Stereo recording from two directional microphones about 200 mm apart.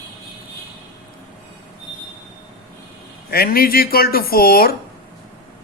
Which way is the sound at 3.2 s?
50° left (ahead or behind).